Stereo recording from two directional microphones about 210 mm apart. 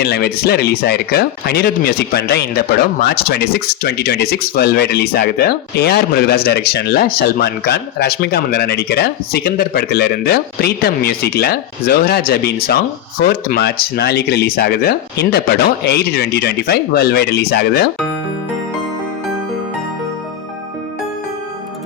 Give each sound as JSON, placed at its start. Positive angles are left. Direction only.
{"t": 0.0, "sound": "speech", "side_deg": 50}